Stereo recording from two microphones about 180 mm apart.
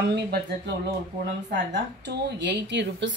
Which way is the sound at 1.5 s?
75° right (ahead or behind).